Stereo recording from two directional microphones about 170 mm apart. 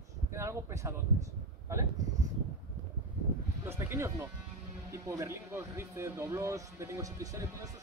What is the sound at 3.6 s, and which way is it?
Speech, 15° right (ahead or behind).